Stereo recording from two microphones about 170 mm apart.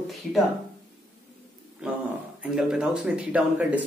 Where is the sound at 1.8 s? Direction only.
5° right (ahead or behind).